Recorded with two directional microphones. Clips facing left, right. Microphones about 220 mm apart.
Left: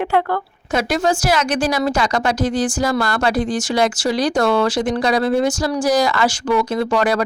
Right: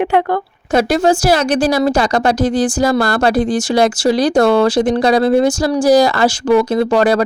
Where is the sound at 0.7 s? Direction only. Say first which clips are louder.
Right 6 dB; 30° right (ahead or behind).